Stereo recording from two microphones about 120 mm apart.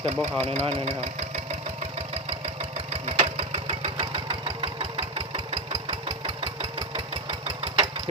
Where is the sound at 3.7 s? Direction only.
50° right (ahead or behind).